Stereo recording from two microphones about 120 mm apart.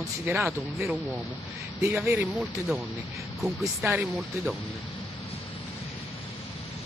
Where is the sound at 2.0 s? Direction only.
15° right (ahead or behind).